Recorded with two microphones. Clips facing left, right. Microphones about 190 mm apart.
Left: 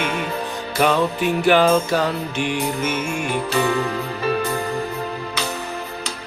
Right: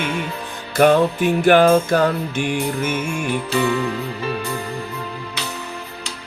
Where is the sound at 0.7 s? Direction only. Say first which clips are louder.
Right 5 dB; 50° right (ahead or behind).